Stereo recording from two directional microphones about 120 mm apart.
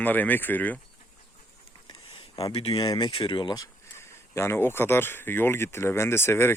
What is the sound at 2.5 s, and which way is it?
Speech, 55° left (ahead or behind).